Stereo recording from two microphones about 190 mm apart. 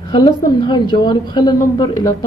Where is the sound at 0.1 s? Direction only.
25° left (ahead or behind).